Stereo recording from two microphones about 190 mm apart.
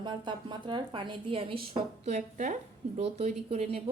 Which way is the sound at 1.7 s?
40° right (ahead or behind).